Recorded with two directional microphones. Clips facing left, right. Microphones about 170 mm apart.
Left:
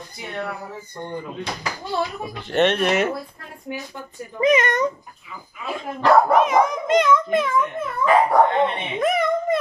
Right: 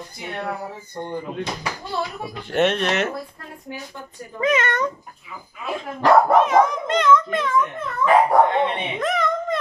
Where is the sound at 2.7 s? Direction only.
10° left (ahead or behind).